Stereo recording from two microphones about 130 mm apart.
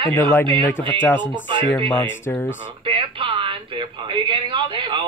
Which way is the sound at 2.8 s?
45° right (ahead or behind).